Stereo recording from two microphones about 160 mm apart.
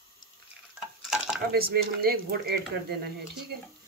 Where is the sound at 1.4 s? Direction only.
75° right (ahead or behind).